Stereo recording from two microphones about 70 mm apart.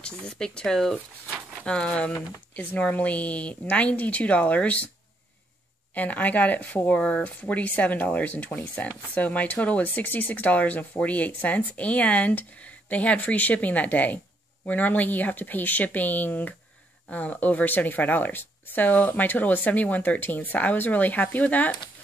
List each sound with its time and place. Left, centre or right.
0.0 s speech: centre
5.9 s speech: left